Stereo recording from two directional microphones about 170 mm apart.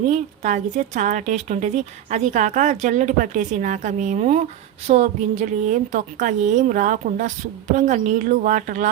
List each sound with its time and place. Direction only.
0.0 s speech: 45° right (ahead or behind)